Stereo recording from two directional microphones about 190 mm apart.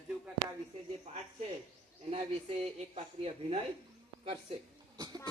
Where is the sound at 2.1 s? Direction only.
35° right (ahead or behind).